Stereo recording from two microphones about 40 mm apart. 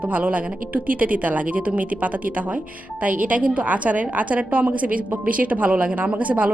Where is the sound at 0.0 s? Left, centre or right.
Right.